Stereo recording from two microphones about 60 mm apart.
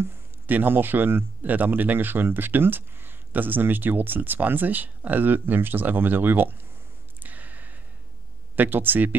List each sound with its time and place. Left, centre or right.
0.0 s speech: right
7.2 s a sound: right
8.5 s speech: right